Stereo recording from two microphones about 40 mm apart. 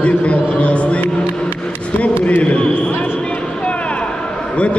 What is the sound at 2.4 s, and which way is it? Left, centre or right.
Speech, left.